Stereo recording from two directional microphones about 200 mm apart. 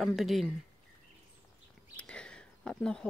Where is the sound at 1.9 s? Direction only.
5° left (ahead or behind).